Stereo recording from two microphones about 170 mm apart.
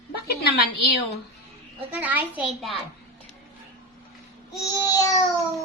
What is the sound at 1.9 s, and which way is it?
Speech, 10° right (ahead or behind).